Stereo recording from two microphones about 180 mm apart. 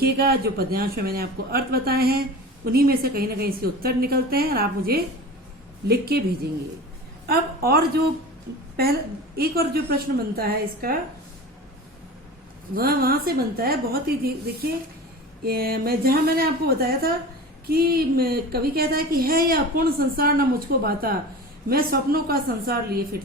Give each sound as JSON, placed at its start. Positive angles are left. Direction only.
{"t": 0.0, "sound": "a woman's voice", "side_deg": -60}
{"t": 12.7, "sound": "a woman's voice", "side_deg": -55}